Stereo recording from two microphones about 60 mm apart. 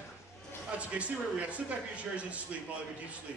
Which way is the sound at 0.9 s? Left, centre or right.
Right.